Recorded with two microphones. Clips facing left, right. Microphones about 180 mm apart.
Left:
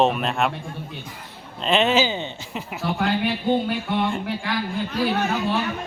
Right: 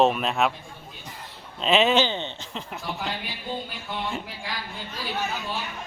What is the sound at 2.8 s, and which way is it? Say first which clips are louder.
Speech: left 11 dB; 60° left (ahead or behind).